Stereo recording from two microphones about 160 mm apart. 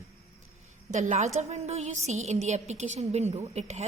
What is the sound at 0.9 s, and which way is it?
A woman's voice, 50° right (ahead or behind).